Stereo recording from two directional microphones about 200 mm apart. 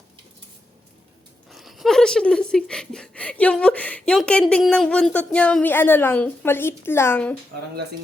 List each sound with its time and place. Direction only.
1.5 s speech: centre (ahead or behind)